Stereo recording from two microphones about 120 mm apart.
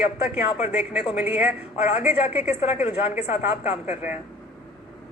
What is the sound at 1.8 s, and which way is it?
Speech, 75° left (ahead or behind).